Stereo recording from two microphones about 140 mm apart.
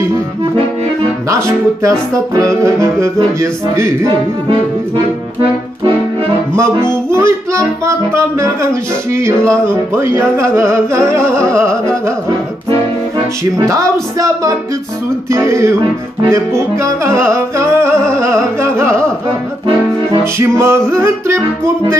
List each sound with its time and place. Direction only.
1.3 s music: 25° right (ahead or behind)
7.1 s music: 20° right (ahead or behind)
13.6 s music: 25° right (ahead or behind)
20.3 s music: 20° right (ahead or behind)